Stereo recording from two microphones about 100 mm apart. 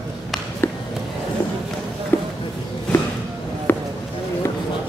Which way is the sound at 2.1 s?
25° left (ahead or behind).